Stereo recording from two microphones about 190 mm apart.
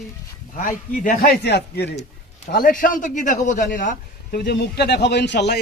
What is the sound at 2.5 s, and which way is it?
A man's voice, 50° left (ahead or behind).